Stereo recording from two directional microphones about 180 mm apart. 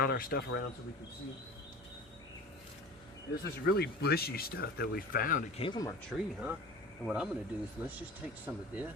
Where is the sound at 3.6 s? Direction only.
65° left (ahead or behind).